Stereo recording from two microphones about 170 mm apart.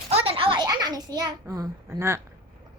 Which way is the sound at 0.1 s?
35° right (ahead or behind).